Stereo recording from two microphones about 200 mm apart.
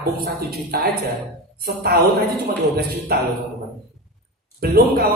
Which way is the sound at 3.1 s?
50° right (ahead or behind).